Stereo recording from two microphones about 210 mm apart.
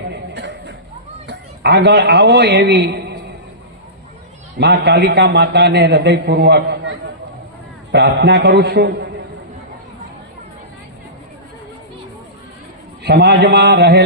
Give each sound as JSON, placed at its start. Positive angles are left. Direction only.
{"t": 0.1, "sound": "a sound", "side_deg": -55}
{"t": 1.3, "sound": "a man's voice", "side_deg": -55}
{"t": 4.5, "sound": "a man's voice", "side_deg": -55}
{"t": 7.9, "sound": "a man's voice", "side_deg": -50}
{"t": 13.1, "sound": "a man's voice", "side_deg": -50}